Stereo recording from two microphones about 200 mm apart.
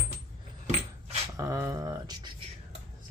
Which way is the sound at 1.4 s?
15° right (ahead or behind).